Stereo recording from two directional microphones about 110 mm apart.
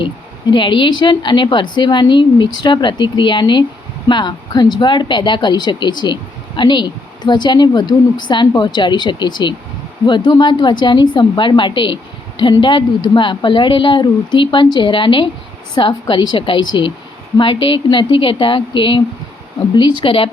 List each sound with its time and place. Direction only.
0.5 s a woman's voice: 50° left (ahead or behind)